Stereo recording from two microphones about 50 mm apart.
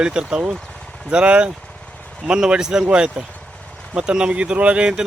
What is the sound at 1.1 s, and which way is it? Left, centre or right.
Speech, right.